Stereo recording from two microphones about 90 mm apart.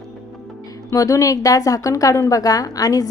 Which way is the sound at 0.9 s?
40° left (ahead or behind).